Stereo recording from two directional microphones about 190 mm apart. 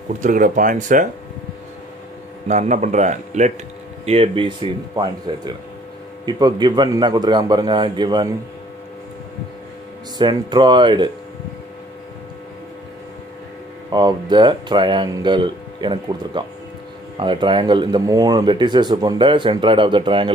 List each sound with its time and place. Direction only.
0.2 s speech: 45° right (ahead or behind)
2.4 s speech: 40° right (ahead or behind); by 8.3 s 25° right (ahead or behind)
10.1 s speech: 25° right (ahead or behind)
13.9 s speech: 25° right (ahead or behind)